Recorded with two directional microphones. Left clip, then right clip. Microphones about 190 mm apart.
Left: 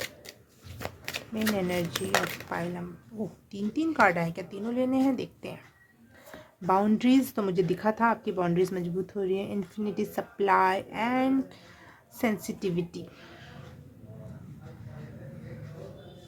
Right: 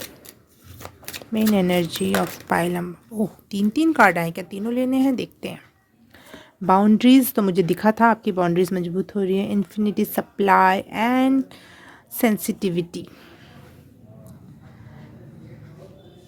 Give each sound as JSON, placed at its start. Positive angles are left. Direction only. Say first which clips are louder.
{"t": 1.3, "sound": "speech", "louder": "right 9 dB", "side_deg": -45}
{"t": 6.7, "sound": "speech", "louder": "right 8 dB", "side_deg": -35}